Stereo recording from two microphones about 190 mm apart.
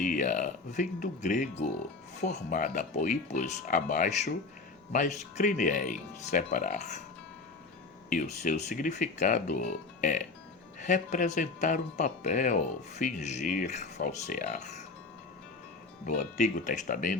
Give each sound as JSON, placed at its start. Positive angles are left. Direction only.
{"t": 0.0, "sound": "speech", "side_deg": 40}
{"t": 8.1, "sound": "speech", "side_deg": 40}
{"t": 16.0, "sound": "speech", "side_deg": 40}